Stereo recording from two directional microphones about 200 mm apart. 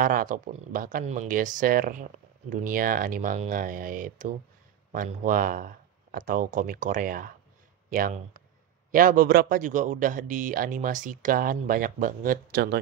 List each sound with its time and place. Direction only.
0.0 s a man's voice: 45° right (ahead or behind)